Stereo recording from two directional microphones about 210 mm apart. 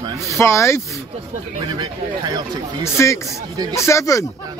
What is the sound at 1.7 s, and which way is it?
Speech, 20° right (ahead or behind).